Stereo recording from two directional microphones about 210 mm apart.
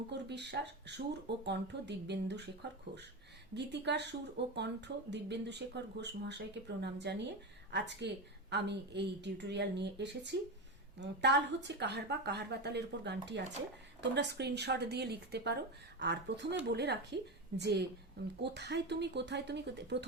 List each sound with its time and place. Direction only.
0.1 s a woman's voice: 55° right (ahead or behind)